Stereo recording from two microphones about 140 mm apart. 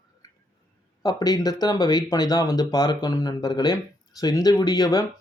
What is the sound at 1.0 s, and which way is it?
Speech, 30° left (ahead or behind).